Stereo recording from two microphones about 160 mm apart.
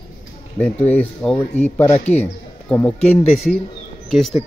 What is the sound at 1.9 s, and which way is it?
Speech, 45° left (ahead or behind).